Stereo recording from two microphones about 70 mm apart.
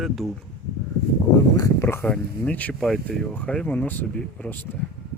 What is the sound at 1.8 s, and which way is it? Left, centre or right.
Speech, left.